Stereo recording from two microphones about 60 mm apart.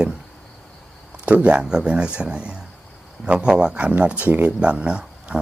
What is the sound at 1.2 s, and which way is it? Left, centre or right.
Speech, right.